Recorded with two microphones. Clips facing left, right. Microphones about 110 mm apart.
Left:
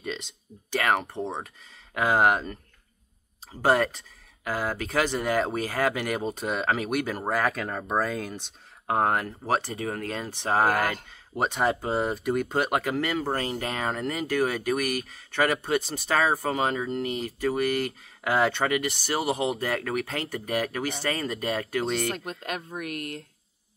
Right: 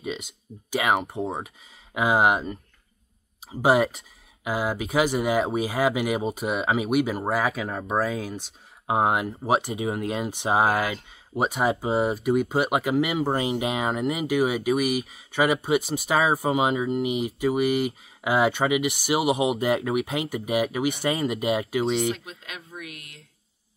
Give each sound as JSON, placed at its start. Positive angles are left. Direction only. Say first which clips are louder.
{"t": 0.0, "sound": "speech", "louder": "right 2 dB", "side_deg": -10}
{"t": 3.6, "sound": "speech", "louder": "right 2 dB", "side_deg": -10}
{"t": 22.1, "sound": "speech", "louder": "left 4 dB", "side_deg": 50}